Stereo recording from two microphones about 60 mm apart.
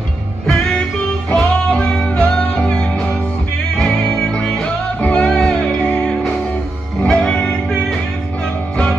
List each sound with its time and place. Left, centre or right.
0.5 s music: centre